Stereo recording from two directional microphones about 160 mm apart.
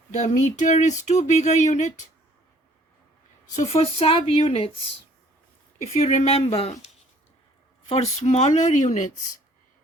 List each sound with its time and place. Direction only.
0.1 s speech: 45° left (ahead or behind)
3.4 s a woman's voice: 50° left (ahead or behind)
5.8 s a woman's voice: 45° left (ahead or behind)
7.9 s speech: 40° left (ahead or behind)